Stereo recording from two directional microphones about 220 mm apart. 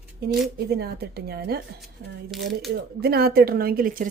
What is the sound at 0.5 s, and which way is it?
Speech, 45° right (ahead or behind).